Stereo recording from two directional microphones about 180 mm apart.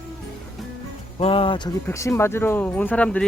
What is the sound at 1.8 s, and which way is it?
Speech, 15° left (ahead or behind).